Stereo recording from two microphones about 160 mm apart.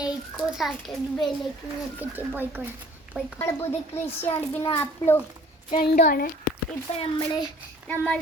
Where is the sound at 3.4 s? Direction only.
15° left (ahead or behind).